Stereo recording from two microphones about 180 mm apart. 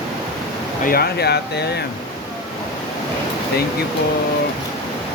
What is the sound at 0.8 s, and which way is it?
Speech, 60° left (ahead or behind).